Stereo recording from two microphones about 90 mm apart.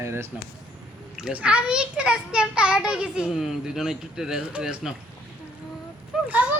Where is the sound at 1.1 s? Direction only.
10° right (ahead or behind).